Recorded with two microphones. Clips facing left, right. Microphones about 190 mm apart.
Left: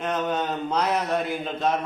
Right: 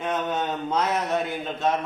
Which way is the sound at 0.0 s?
5° right (ahead or behind).